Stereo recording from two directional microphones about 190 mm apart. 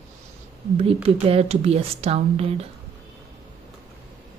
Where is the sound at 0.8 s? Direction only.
30° right (ahead or behind).